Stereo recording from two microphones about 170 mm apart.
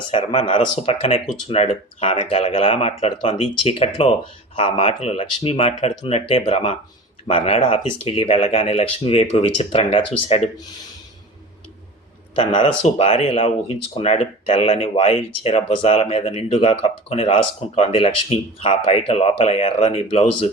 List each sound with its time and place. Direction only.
0.1 s speech: 35° left (ahead or behind)
12.4 s speech: 35° left (ahead or behind)